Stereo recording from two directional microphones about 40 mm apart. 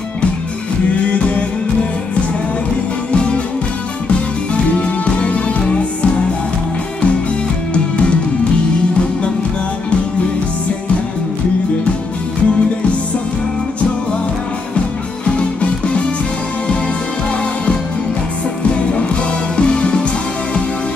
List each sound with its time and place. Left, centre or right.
1.1 s music: left
3.1 s music: left
4.7 s music: left
7.7 s music: left
15.2 s music: left
19.5 s music: left